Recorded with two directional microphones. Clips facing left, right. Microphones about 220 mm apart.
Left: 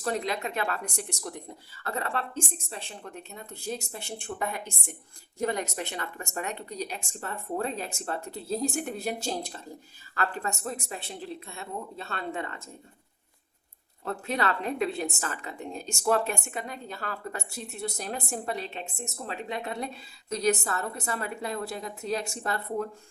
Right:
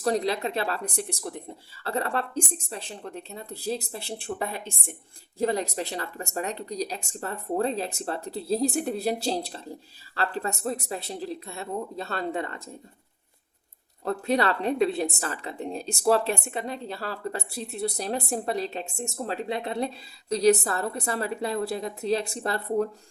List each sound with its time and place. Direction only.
0.0 s a woman's voice: 35° right (ahead or behind)
14.0 s a woman's voice: 35° right (ahead or behind)